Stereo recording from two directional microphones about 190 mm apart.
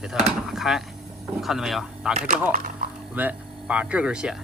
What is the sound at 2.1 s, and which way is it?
Speech, 40° right (ahead or behind).